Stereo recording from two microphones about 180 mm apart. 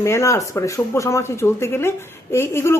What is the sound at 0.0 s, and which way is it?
Speech, 15° left (ahead or behind).